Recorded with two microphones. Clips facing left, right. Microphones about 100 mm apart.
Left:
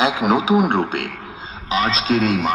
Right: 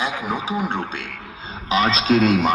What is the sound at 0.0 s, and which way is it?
Speech, 90° left.